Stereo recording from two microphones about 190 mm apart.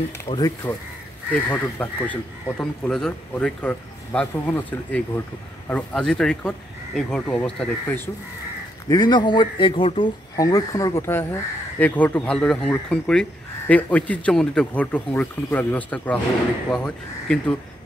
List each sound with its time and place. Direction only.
0.3 s speech: 20° left (ahead or behind)
1.3 s speech: 10° left (ahead or behind)
8.8 s speech: 20° left (ahead or behind); by 17.6 s 5° left (ahead or behind)